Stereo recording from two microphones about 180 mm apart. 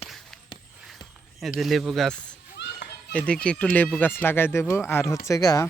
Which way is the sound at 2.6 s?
75° left (ahead or behind).